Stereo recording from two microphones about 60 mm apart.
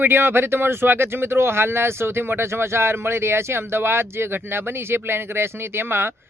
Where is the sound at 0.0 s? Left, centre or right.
Right.